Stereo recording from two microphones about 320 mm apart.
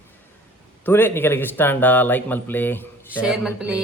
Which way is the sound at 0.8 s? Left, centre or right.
Centre.